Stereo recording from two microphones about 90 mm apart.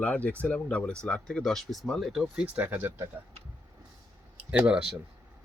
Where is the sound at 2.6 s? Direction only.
25° right (ahead or behind).